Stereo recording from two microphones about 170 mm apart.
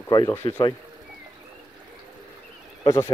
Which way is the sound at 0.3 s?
15° left (ahead or behind).